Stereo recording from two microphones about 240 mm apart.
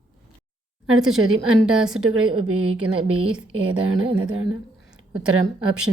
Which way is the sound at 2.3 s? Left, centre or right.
Right.